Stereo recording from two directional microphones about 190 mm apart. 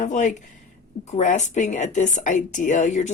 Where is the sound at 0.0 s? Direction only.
40° left (ahead or behind).